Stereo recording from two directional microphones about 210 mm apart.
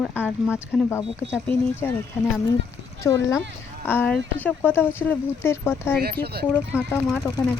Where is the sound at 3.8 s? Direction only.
10° left (ahead or behind).